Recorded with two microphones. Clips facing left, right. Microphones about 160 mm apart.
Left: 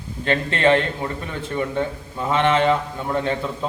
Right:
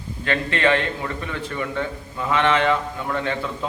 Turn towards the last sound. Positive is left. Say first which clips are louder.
# left 2 dB
turn(degrees=25)  # may be behind; listen again after turning